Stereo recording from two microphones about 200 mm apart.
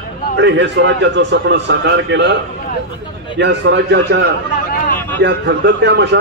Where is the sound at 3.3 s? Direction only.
60° right (ahead or behind).